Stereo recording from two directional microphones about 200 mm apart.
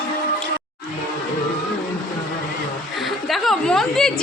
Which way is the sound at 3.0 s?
Centre (ahead or behind).